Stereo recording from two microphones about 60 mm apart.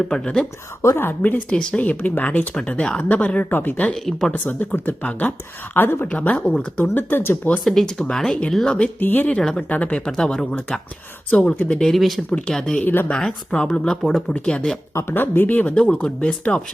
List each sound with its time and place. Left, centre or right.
0.8 s a woman's voice: left
1.0 s speech: left
3.5 s speech: left
5.7 s speech: left
6.1 s speech: left
6.9 s speech: left
7.6 s speech: centre
9.0 s speech: left
10.1 s speech: centre
12.3 s speech: centre
12.8 s speech: left
13.1 s speech: centre
15.1 s speech: left
15.7 s speech: centre